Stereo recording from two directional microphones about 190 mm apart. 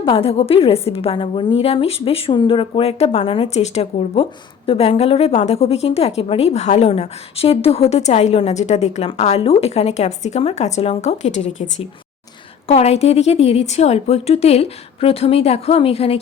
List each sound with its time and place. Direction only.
0.0 s a woman's voice: 30° left (ahead or behind)